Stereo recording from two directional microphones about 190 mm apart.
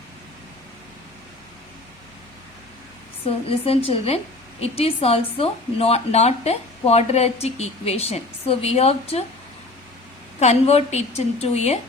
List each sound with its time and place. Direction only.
3.2 s speech: 30° left (ahead or behind)
10.4 s speech: 35° left (ahead or behind)